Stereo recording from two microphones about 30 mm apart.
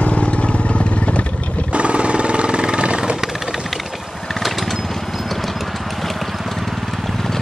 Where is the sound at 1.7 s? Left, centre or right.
Right.